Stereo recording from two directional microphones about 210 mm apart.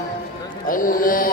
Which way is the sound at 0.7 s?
40° left (ahead or behind).